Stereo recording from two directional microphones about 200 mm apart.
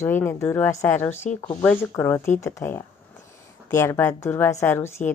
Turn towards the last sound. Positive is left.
turn(degrees=10)  # may be behind; listen again after turning